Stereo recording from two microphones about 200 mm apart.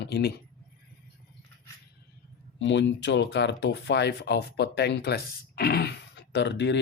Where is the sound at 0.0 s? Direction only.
55° left (ahead or behind).